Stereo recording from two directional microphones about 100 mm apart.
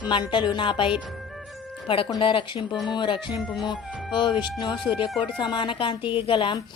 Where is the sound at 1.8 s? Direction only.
65° left (ahead or behind).